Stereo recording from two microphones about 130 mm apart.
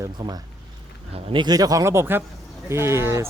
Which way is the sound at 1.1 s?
50° right (ahead or behind).